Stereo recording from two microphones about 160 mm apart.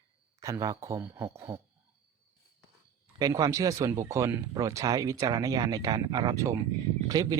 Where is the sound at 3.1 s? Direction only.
25° right (ahead or behind).